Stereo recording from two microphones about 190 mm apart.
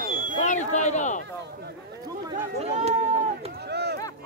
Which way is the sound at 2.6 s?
35° right (ahead or behind).